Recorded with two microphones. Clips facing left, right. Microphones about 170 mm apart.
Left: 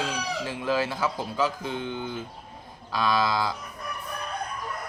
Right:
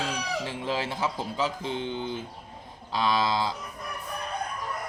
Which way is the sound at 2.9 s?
25° right (ahead or behind).